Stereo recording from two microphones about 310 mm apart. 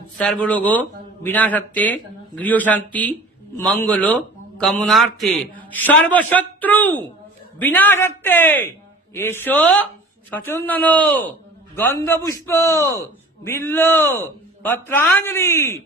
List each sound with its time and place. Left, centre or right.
0.2 s a man's voice: centre